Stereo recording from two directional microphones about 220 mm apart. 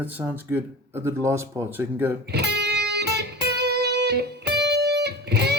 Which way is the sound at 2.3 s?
50° right (ahead or behind).